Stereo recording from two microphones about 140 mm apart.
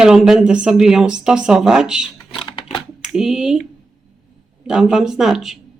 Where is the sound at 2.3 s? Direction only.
40° left (ahead or behind).